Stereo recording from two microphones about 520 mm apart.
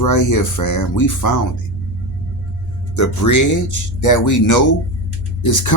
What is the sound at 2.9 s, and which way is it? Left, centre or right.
Speech, left.